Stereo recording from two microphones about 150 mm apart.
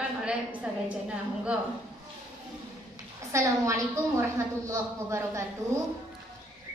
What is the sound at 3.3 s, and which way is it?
A woman's voice, 20° right (ahead or behind).